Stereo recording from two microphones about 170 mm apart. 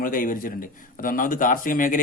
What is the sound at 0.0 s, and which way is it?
A man's voice, 55° left (ahead or behind).